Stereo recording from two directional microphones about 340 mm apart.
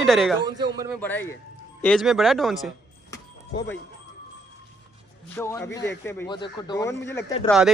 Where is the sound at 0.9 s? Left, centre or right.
Centre.